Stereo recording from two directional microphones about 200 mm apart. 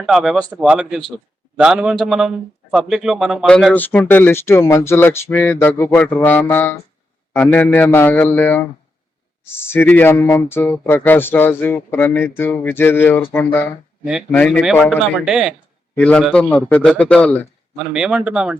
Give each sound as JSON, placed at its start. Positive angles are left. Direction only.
{"t": 0.0, "sound": "a man's voice", "side_deg": 0}
{"t": 14.0, "sound": "a man's voice", "side_deg": 0}